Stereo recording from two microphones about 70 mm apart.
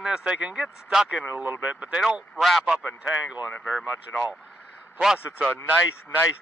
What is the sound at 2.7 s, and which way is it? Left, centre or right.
Speech, centre.